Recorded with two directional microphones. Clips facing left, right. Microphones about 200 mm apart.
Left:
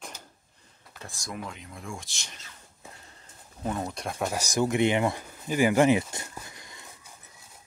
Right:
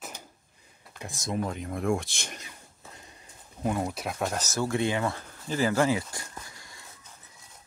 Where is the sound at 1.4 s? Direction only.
45° right (ahead or behind).